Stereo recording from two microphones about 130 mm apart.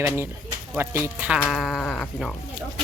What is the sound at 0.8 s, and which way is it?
Speech, 15° right (ahead or behind).